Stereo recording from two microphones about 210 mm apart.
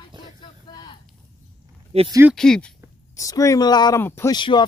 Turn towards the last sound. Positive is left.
turn(degrees=20)  # may be behind; listen again after turning